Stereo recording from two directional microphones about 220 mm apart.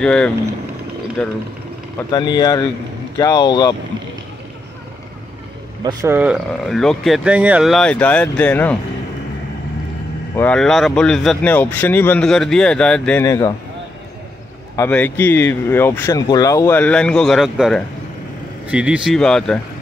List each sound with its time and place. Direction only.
0.0 s speech: 5° left (ahead or behind)
2.0 s speech: 20° left (ahead or behind)
5.9 s speech: 15° right (ahead or behind); by 8.7 s 5° left (ahead or behind)
10.3 s speech: 5° left (ahead or behind)
14.8 s speech: 10° left (ahead or behind)